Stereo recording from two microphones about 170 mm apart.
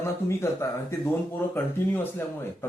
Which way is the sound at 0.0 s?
15° left (ahead or behind).